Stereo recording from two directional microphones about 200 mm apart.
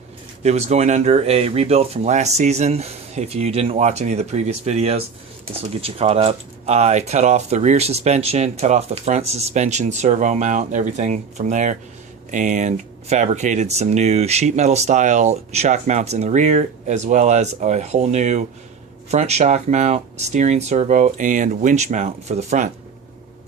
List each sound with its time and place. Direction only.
0.4 s speech: 35° right (ahead or behind)